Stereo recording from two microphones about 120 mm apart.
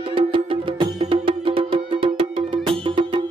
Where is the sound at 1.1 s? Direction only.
45° right (ahead or behind).